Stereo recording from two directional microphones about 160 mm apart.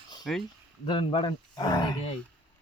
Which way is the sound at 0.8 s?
30° left (ahead or behind).